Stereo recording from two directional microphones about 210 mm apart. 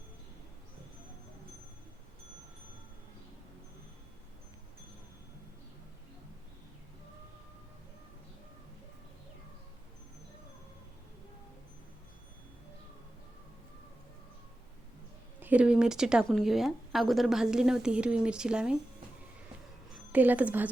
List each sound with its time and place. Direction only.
15.4 s speech: 5° right (ahead or behind)
19.9 s a woman's voice: 5° right (ahead or behind)